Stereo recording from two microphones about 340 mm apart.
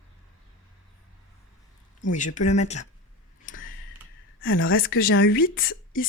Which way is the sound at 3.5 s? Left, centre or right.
Left.